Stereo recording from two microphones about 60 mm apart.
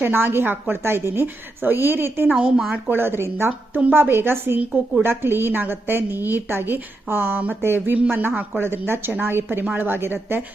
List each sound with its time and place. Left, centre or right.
0.0 s a woman's voice: right
2.3 s speech: centre
2.9 s a woman's voice: right